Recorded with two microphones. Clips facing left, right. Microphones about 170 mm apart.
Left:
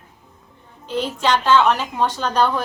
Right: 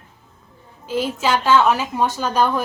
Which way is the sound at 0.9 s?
5° right (ahead or behind).